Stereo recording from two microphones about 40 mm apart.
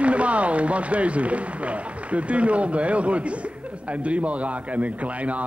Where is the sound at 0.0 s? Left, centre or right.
Right.